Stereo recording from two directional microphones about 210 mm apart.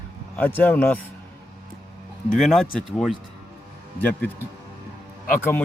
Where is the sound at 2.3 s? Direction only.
Centre (ahead or behind).